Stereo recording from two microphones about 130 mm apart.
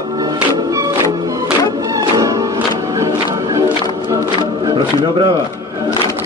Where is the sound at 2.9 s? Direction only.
25° right (ahead or behind).